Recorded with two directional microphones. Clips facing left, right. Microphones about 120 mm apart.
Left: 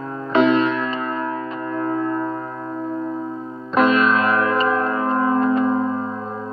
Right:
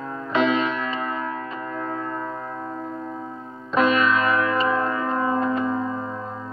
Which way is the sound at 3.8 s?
55° left (ahead or behind).